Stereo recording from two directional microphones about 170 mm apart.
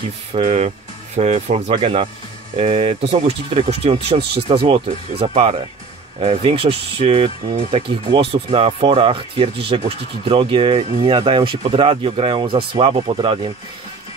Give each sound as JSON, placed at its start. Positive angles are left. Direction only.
{"t": 0.3, "sound": "speech", "side_deg": -35}
{"t": 4.2, "sound": "speech", "side_deg": -75}
{"t": 4.5, "sound": "speech", "side_deg": -30}